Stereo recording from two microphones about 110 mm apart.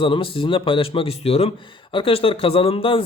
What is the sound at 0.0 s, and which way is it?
Speech, 50° left (ahead or behind).